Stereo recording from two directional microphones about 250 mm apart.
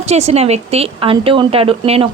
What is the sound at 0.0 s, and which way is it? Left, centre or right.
A woman's voice, right.